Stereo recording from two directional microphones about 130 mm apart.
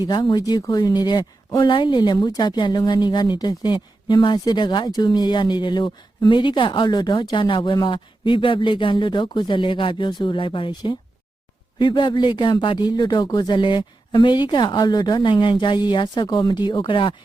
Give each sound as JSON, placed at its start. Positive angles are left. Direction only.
{"t": 0.1, "sound": "speech", "side_deg": 35}